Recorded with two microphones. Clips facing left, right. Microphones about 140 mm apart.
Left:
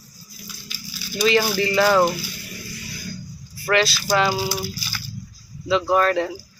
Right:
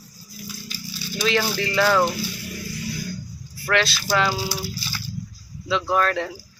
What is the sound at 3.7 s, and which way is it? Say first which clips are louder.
Speech: left 2 dB; centre (ahead or behind).